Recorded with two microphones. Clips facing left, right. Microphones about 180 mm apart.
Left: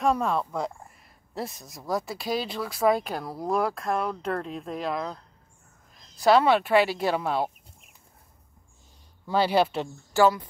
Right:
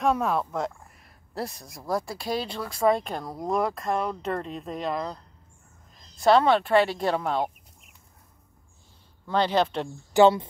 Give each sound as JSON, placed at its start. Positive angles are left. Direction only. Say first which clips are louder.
{"t": 0.0, "sound": "speech", "louder": "even", "side_deg": 0}
{"t": 9.3, "sound": "speech", "louder": "left 1 dB", "side_deg": 10}
{"t": 10.1, "sound": "speech", "louder": "right 3 dB", "side_deg": -25}